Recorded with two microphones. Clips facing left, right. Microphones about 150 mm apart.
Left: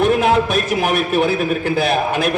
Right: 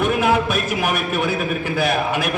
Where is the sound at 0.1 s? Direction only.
25° left (ahead or behind).